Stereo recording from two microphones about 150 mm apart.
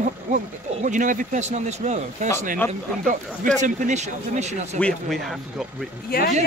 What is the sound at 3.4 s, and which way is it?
Speech, 55° right (ahead or behind).